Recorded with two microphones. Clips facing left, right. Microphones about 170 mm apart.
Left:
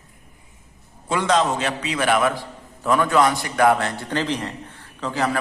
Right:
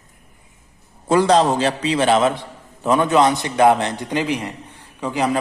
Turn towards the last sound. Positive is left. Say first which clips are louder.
# right 3 dB
turn(degrees=-15)  # may be behind; listen again after turning